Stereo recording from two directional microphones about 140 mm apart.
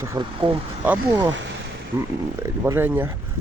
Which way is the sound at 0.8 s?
15° right (ahead or behind).